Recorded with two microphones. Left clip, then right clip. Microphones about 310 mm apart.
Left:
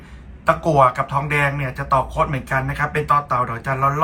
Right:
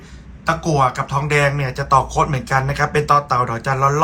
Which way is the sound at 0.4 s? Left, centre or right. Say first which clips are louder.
Left 2 dB; centre.